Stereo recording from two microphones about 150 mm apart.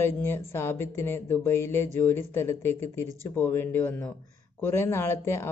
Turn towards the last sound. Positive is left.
turn(degrees=20)  # may be behind; listen again after turning